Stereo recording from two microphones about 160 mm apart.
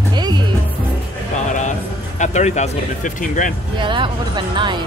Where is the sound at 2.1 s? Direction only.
45° left (ahead or behind).